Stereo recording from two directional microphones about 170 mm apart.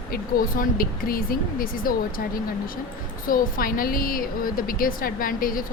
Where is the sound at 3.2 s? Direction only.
55° left (ahead or behind).